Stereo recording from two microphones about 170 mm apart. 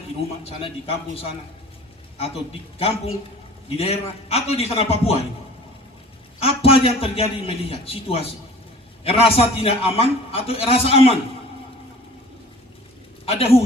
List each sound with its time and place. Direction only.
0.4 s a man's voice: 35° left (ahead or behind)
6.4 s a man's voice: 35° left (ahead or behind)
13.2 s a man's voice: 35° left (ahead or behind)